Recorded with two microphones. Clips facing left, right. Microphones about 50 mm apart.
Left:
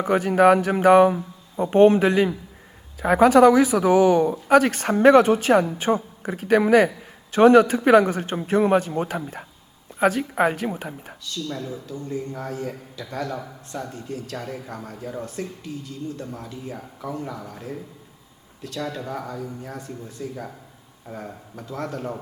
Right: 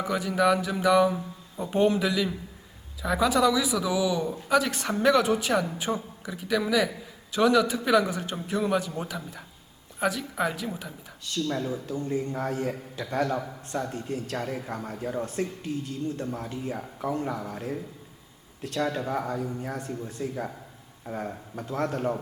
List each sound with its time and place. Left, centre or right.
0.0 s a man's voice: left
11.4 s a man's voice: centre